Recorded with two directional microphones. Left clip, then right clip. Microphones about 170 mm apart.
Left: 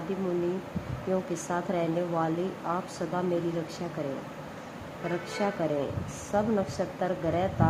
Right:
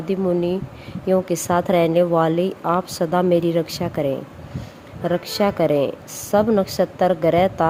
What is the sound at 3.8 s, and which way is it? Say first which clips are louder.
Speech: right 10 dB; 90° right.